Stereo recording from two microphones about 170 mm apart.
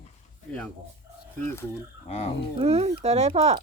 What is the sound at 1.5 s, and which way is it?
Speech, 15° left (ahead or behind).